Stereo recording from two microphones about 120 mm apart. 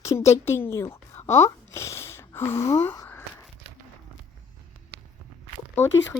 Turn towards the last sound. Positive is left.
turn(degrees=15)  # may be behind; listen again after turning